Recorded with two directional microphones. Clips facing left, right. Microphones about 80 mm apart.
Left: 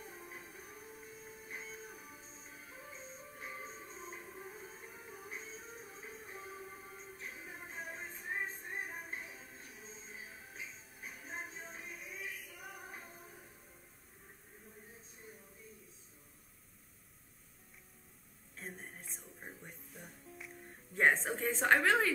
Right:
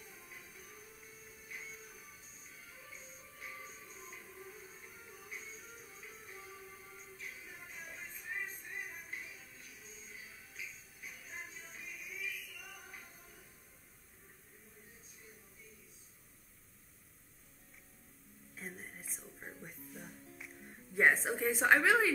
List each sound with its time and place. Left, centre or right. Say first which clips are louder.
0.0 s music: left 5 dB; left
18.6 s music: even; centre